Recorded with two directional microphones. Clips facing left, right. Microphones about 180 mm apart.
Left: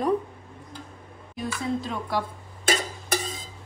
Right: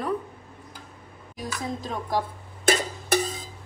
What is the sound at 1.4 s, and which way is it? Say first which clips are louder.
Speech: left 3 dB; 40° right (ahead or behind).